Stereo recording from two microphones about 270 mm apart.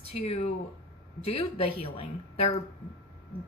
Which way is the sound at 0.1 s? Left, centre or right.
Left.